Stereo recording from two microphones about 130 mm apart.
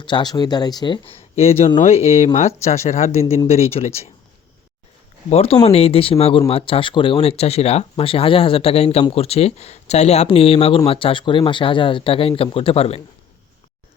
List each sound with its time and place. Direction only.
0.0 s speech: 35° left (ahead or behind)
1.0 s speech: 50° left (ahead or behind)
5.3 s speech: 50° left (ahead or behind)